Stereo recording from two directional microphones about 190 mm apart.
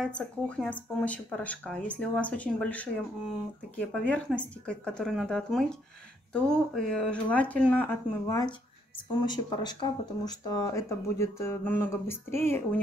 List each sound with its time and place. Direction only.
0.0 s speech: 5° left (ahead or behind)